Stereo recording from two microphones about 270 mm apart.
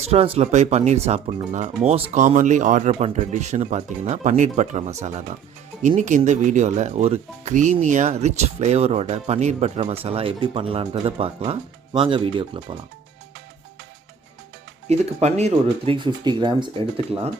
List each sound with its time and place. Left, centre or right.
0.0 s speech: right
14.8 s speech: right